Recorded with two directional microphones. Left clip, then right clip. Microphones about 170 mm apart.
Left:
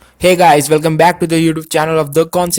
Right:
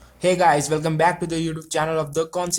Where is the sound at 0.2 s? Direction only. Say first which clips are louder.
Left 9 dB; 50° left (ahead or behind).